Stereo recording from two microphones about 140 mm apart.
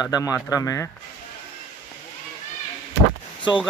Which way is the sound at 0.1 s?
25° left (ahead or behind).